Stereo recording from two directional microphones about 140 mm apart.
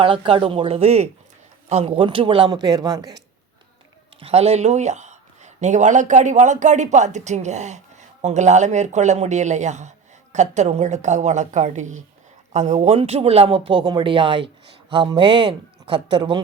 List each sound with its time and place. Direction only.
0.0 s speech: 40° right (ahead or behind)
4.2 s speech: 45° right (ahead or behind)